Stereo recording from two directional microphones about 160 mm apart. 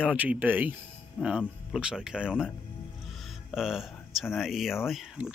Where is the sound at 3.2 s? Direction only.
Centre (ahead or behind).